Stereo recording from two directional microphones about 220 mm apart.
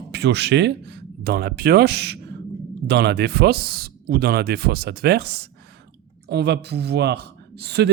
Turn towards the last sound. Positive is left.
turn(degrees=-50)  # may be behind; listen again after turning